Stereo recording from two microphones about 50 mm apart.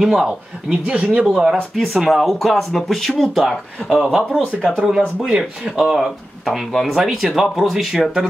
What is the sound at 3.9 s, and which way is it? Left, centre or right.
Speech, centre.